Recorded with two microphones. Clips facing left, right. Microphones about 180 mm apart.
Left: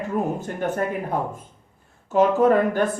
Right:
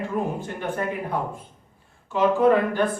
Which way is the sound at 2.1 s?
45° left (ahead or behind).